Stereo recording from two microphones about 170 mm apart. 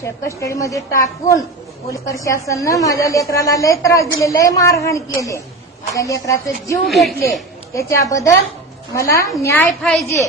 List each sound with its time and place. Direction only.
0.0 s a woman's voice: 15° left (ahead or behind)
6.8 s a woman's voice: centre (ahead or behind)
7.7 s a woman's voice: 20° left (ahead or behind)